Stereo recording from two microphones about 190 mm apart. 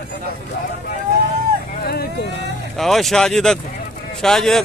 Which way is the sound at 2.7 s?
Centre (ahead or behind).